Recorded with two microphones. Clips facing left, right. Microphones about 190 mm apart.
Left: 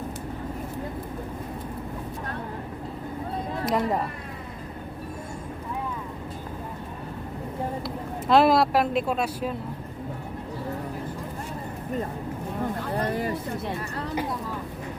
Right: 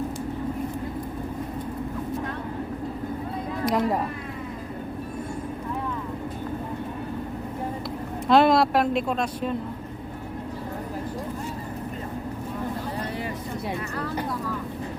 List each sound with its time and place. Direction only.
3.7 s speech: centre (ahead or behind)
8.3 s speech: centre (ahead or behind)
13.0 s a sound: 45° left (ahead or behind)